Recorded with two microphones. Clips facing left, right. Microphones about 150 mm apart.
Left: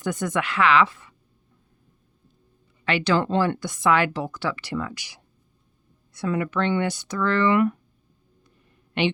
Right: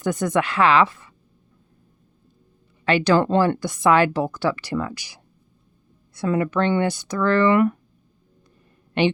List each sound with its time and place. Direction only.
0.0 s speech: 35° right (ahead or behind)
2.8 s speech: 40° right (ahead or behind)